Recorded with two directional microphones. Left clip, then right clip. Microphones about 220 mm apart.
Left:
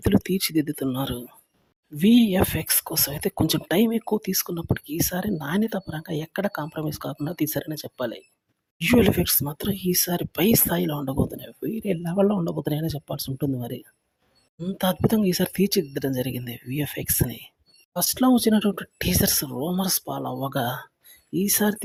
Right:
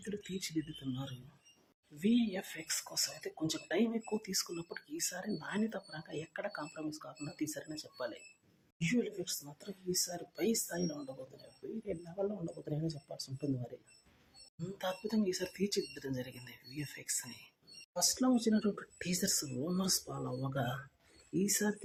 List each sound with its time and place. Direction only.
0.0 s speech: 45° left (ahead or behind)